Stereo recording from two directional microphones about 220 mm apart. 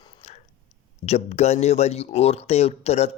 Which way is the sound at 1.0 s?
30° left (ahead or behind).